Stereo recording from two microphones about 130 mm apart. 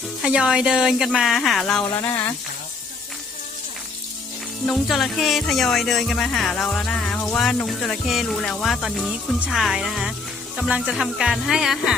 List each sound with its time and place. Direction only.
0.2 s music: 5° right (ahead or behind)
2.0 s speech: 15° left (ahead or behind)
4.6 s music: centre (ahead or behind)